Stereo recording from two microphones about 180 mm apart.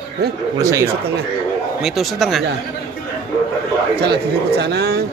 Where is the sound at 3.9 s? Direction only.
65° right (ahead or behind).